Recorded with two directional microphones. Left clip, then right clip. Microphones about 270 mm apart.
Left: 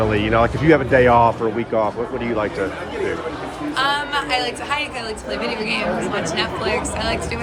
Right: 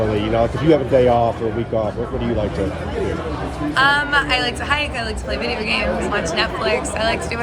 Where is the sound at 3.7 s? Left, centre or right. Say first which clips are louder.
Right 5 dB; centre.